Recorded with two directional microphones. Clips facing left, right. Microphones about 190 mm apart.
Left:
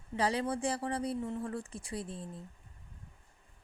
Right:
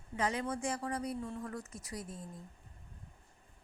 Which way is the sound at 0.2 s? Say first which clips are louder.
Left 3 dB; 35° left (ahead or behind).